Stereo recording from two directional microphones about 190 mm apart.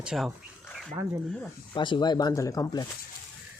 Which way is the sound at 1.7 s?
25° left (ahead or behind).